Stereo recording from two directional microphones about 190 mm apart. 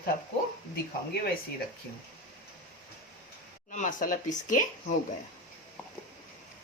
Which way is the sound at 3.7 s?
40° left (ahead or behind).